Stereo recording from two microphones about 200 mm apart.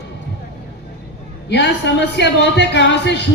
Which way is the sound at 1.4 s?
60° left (ahead or behind).